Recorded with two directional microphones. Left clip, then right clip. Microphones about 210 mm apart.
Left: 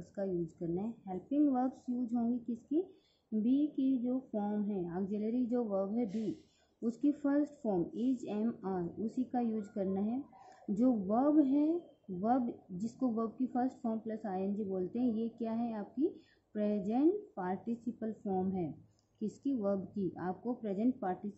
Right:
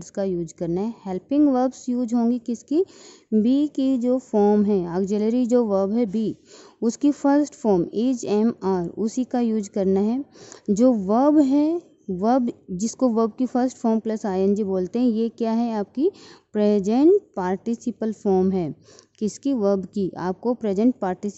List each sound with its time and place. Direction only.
0.0 s a woman's voice: 50° right (ahead or behind)